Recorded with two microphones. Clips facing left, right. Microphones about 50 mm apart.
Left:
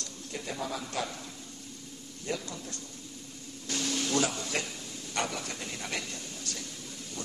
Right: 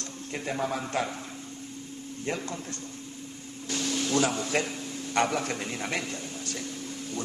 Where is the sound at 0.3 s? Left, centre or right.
Right.